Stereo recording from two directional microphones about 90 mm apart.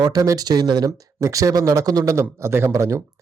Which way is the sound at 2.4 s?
30° right (ahead or behind).